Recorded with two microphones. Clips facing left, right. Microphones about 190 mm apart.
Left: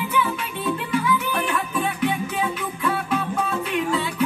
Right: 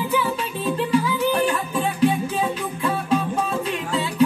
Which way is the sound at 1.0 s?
35° right (ahead or behind).